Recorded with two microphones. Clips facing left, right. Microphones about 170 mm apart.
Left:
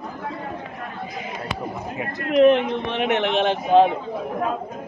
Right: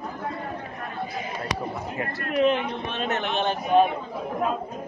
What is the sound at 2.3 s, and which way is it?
A man's voice, 85° left.